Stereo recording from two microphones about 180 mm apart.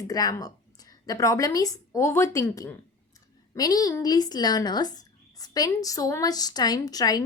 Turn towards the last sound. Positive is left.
turn(degrees=20)  # may be behind; listen again after turning